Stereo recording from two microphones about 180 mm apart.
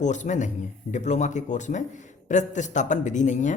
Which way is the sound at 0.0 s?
40° left (ahead or behind).